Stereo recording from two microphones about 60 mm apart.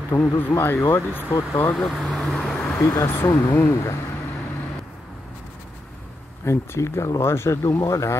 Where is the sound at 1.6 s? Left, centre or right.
Left.